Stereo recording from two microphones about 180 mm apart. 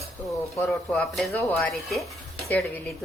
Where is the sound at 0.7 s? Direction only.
5° left (ahead or behind).